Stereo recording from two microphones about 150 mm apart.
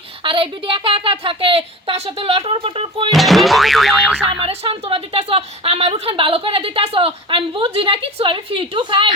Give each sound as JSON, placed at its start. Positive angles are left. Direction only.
{"t": 0.2, "sound": "a woman's voice", "side_deg": -35}
{"t": 3.1, "sound": "boing", "side_deg": 0}
{"t": 4.4, "sound": "a woman's voice", "side_deg": -40}